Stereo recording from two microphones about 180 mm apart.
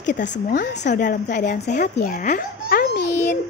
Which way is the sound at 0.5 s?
50° left (ahead or behind).